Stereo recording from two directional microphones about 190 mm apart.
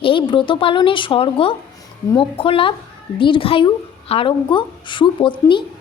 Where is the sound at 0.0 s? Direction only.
25° left (ahead or behind).